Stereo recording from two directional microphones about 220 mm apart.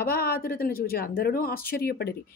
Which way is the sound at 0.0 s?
45° left (ahead or behind).